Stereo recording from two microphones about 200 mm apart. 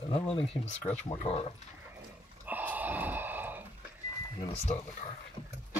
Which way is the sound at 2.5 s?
10° right (ahead or behind).